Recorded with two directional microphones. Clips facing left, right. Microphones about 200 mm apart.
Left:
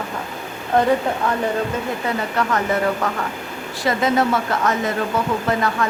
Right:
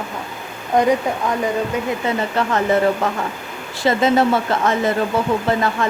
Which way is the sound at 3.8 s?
25° right (ahead or behind).